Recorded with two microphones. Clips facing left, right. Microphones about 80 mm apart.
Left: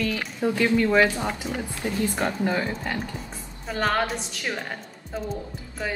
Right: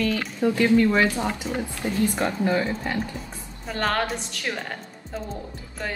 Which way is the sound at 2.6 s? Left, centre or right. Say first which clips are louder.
Right 2 dB; right.